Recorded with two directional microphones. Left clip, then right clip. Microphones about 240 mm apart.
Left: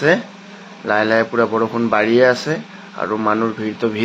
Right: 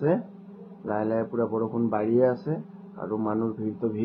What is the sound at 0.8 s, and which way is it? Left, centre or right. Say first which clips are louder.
Speech: left 12 dB; left.